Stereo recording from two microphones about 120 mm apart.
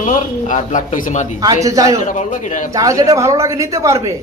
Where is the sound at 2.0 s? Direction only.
90° left.